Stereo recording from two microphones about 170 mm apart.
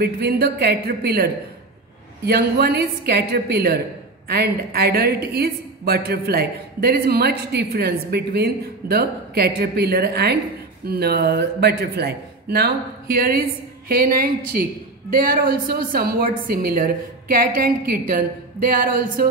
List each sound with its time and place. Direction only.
0.0 s a woman's voice: 70° right (ahead or behind)